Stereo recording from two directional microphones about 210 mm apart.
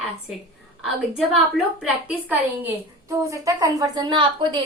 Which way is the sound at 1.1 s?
5° right (ahead or behind).